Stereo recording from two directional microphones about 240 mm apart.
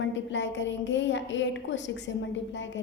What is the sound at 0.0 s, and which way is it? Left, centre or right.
A woman's voice, left.